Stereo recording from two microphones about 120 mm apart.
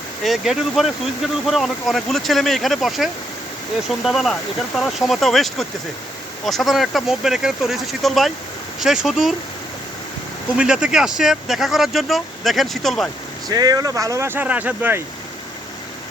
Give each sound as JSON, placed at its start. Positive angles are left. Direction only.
{"t": 0.2, "sound": "speech", "side_deg": 0}
{"t": 10.6, "sound": "speech", "side_deg": -5}
{"t": 13.5, "sound": "speech", "side_deg": -35}